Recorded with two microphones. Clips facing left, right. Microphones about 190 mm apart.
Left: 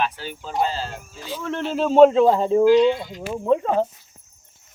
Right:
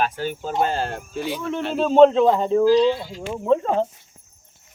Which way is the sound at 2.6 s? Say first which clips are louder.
Left 1 dB; 35° right (ahead or behind).